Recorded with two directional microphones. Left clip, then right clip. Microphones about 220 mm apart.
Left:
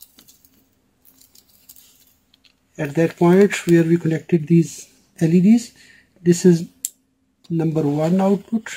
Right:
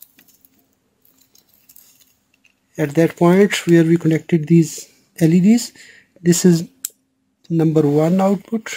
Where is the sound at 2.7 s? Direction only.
45° right (ahead or behind).